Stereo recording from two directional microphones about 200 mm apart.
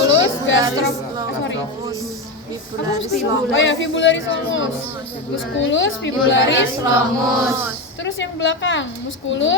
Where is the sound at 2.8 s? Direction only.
65° left (ahead or behind).